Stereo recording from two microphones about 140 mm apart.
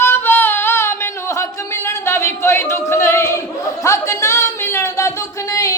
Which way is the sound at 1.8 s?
20° left (ahead or behind).